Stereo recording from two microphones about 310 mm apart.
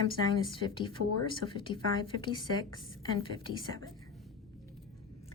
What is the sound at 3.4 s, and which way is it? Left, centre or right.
Speech, centre.